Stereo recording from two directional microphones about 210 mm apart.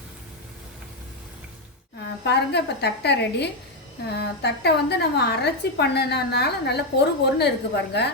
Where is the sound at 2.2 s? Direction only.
55° left (ahead or behind).